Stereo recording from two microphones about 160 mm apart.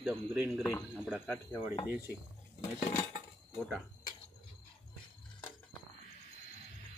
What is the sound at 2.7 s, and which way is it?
Cutlery, 45° left (ahead or behind).